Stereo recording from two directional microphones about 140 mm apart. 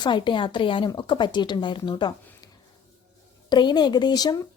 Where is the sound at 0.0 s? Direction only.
35° left (ahead or behind).